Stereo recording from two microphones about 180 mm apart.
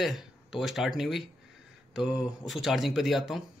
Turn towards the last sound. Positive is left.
turn(degrees=0)  # may be behind; listen again after turning